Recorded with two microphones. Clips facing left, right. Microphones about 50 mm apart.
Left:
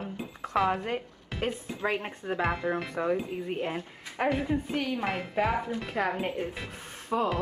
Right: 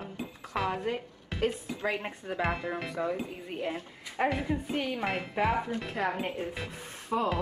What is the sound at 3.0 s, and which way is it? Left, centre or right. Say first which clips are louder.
Speech: left 4 dB; left.